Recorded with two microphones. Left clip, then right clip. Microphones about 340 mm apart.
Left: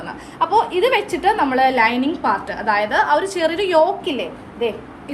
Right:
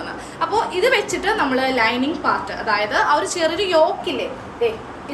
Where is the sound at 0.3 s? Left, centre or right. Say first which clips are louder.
Left 3 dB; centre.